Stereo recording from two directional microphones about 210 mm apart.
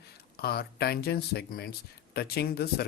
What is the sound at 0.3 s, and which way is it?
Speech, 50° left (ahead or behind).